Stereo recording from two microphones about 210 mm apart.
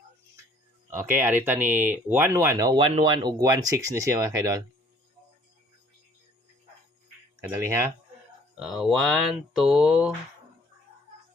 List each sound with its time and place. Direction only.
0.9 s speech: 10° right (ahead or behind)
7.5 s speech: 15° right (ahead or behind)
8.5 s speech: centre (ahead or behind)